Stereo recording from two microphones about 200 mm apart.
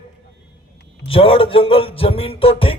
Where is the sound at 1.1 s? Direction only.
25° left (ahead or behind).